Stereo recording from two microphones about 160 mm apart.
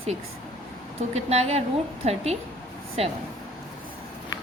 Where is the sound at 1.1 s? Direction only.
40° right (ahead or behind).